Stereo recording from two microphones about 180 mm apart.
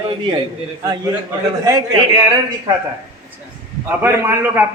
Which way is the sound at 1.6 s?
20° right (ahead or behind).